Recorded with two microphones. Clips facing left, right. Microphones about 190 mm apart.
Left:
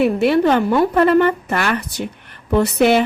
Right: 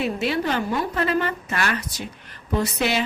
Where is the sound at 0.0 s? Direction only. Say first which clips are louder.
Left 9 dB; 60° left (ahead or behind).